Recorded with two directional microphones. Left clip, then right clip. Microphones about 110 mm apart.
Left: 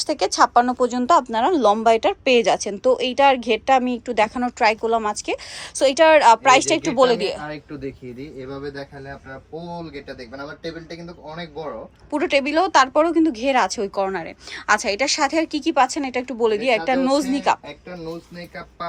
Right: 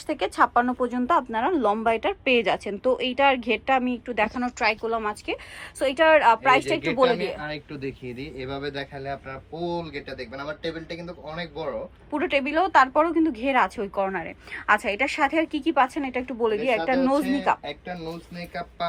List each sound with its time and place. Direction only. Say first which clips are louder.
0.0 s a woman's voice: left 5 dB; 35° left (ahead or behind)
8.4 s speech: right 1 dB; 15° right (ahead or behind)
12.1 s speech: left 4 dB; 35° left (ahead or behind)